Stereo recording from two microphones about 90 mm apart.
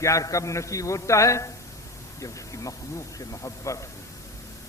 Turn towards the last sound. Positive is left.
turn(degrees=35)  # may be behind; listen again after turning